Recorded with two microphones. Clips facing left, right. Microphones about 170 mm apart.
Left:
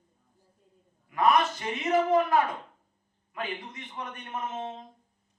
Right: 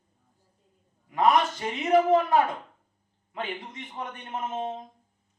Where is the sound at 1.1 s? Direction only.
25° right (ahead or behind).